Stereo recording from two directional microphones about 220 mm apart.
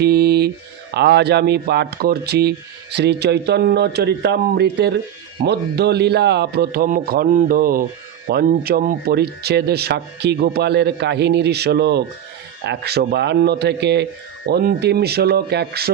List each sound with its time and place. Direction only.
0.0 s speech: 50° right (ahead or behind)